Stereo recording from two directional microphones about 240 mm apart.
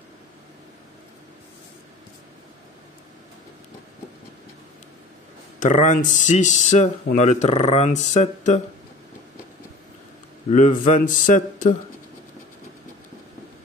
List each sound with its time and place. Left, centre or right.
5.6 s speech: left
10.5 s speech: left